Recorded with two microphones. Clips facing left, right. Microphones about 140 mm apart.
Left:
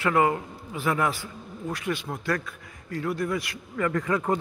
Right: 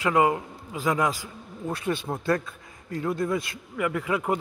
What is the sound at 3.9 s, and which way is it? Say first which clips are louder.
Speech: left 1 dB; 10° right (ahead or behind).